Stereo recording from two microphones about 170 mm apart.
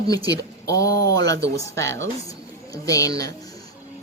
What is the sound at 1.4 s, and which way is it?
Speech, 15° left (ahead or behind).